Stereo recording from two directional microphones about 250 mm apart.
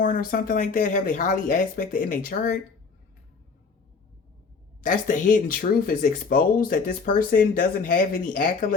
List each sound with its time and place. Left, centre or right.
0.0 s speech: left
4.8 s speech: left